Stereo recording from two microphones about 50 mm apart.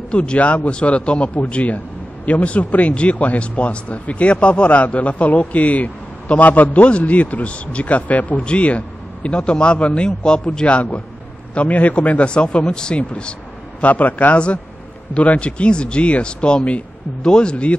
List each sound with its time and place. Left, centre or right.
0.1 s speech: left
13.7 s a man's voice: left